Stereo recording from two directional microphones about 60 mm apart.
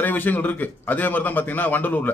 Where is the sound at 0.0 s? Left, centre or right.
Left.